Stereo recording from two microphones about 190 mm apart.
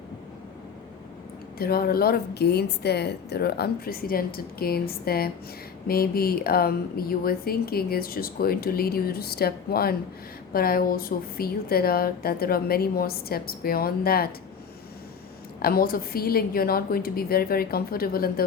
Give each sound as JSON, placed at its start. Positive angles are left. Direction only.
{"t": 1.5, "sound": "speech", "side_deg": 50}
{"t": 15.6, "sound": "speech", "side_deg": 50}